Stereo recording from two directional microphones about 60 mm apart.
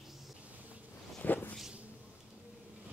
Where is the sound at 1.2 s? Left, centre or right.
Left.